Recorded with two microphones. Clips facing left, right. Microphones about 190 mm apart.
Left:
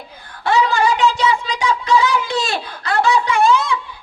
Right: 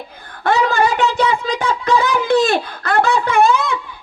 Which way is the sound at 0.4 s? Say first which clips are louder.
Right 1 dB; 55° right (ahead or behind).